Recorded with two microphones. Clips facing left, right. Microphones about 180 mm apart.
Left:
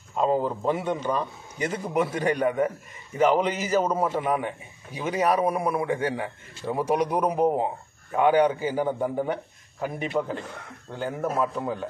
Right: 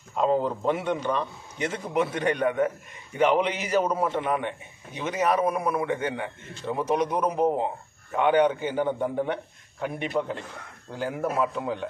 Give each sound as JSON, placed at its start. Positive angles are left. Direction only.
{"t": 0.1, "sound": "a man's voice", "side_deg": 0}